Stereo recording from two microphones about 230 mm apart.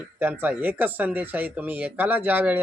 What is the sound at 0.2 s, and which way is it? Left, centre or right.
Speech, centre.